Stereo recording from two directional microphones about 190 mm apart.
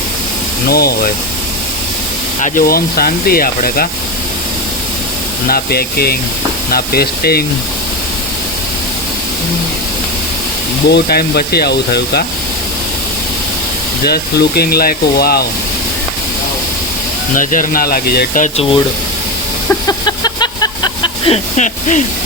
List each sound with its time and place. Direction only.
0.7 s speech: 55° left (ahead or behind)
2.4 s speech: 50° left (ahead or behind)
5.5 s speech: 55° left (ahead or behind)
10.9 s speech: 55° left (ahead or behind)
14.0 s speech: 55° left (ahead or behind)
17.3 s speech: 45° left (ahead or behind)
19.9 s a sound: 20° left (ahead or behind); by 22.0 s 40° left (ahead or behind)